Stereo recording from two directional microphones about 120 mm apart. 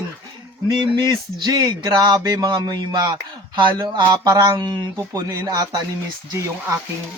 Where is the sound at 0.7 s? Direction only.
40° right (ahead or behind).